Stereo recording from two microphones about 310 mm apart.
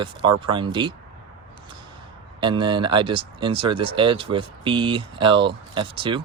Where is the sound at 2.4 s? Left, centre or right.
Centre.